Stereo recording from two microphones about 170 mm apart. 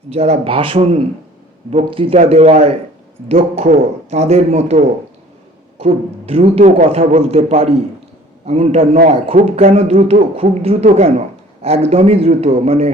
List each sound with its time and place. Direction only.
0.1 s a man's voice: 40° right (ahead or behind)